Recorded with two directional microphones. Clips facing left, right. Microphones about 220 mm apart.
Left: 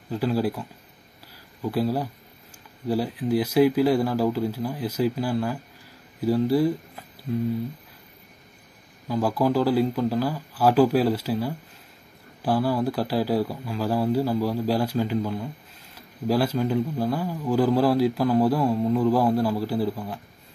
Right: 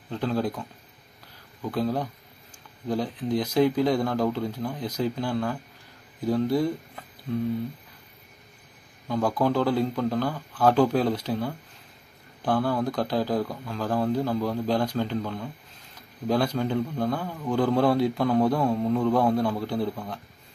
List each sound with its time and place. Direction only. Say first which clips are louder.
0.1 s speech: left 3 dB; 5° left (ahead or behind)
9.0 s a man's voice: left 1 dB; 5° left (ahead or behind)